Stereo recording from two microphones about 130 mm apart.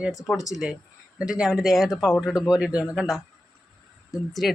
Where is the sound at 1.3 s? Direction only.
5° right (ahead or behind).